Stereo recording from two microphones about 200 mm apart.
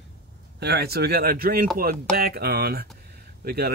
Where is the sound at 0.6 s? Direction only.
55° right (ahead or behind).